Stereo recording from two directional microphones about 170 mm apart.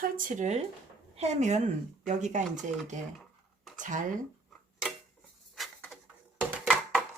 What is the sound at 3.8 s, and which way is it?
Speech, 50° right (ahead or behind).